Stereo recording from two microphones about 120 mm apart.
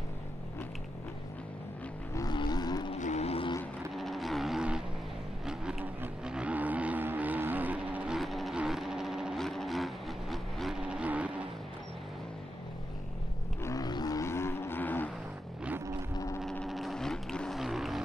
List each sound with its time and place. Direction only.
2.1 s a sound: 35° left (ahead or behind)
2.9 s vehicle: 70° left (ahead or behind)
3.9 s vehicle: centre (ahead or behind)
8.2 s vehicle: centre (ahead or behind)
13.6 s vehicle: 30° left (ahead or behind)
16.6 s vehicle: centre (ahead or behind)